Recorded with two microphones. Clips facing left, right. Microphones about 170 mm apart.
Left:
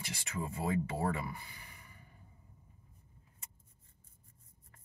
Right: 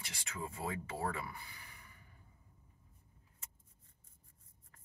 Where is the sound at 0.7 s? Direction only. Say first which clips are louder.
Left 6 dB; 15° left (ahead or behind).